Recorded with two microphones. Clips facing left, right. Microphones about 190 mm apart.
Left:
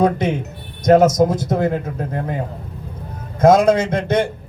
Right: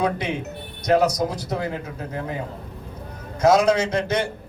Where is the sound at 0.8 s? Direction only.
45° left (ahead or behind).